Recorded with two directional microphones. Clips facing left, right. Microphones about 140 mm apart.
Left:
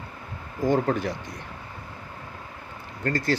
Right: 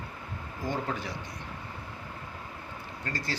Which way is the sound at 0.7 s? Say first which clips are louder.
Left 10 dB; 50° left (ahead or behind).